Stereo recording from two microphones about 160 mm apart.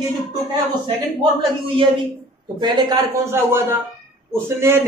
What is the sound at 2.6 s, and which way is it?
A man's voice, 25° right (ahead or behind).